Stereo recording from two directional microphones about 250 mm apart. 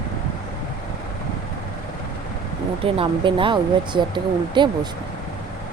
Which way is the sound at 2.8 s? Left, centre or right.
Right.